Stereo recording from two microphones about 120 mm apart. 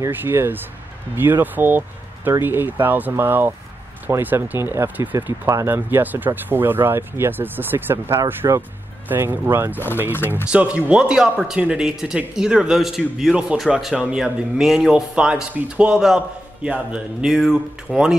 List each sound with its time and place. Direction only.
0.0 s speech: 15° right (ahead or behind)
10.1 s speech: 20° left (ahead or behind)
10.5 s speech: 10° right (ahead or behind)